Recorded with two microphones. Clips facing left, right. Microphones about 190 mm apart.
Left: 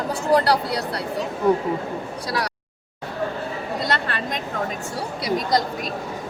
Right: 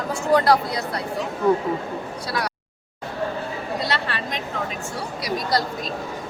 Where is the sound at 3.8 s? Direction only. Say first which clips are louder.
Left 2 dB; 50° left (ahead or behind).